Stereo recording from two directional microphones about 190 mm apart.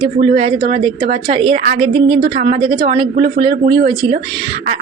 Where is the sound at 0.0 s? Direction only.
30° right (ahead or behind).